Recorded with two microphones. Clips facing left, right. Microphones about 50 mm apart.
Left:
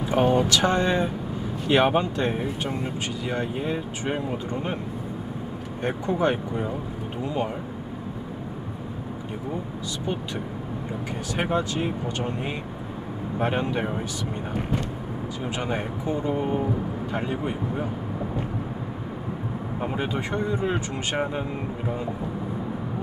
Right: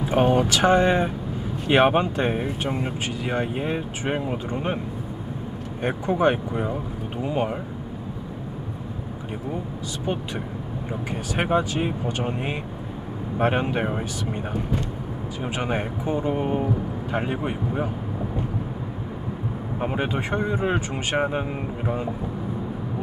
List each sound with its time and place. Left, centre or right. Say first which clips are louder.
0.0 s speech: right 1 dB; right
5.8 s speech: right 2 dB; centre
11.3 s speech: right 3 dB; centre
15.4 s speech: right 3 dB; right
19.8 s speech: right 2 dB; right